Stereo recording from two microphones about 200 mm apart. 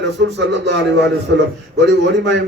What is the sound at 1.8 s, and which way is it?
Speech, 60° right (ahead or behind).